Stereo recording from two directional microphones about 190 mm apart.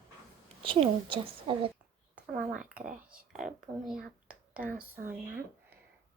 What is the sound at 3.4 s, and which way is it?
Speech, centre (ahead or behind).